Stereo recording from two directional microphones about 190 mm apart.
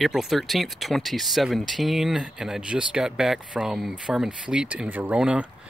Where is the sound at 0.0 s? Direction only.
Centre (ahead or behind).